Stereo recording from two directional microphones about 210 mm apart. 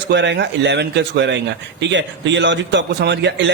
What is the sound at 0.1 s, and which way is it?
Speech, 55° right (ahead or behind).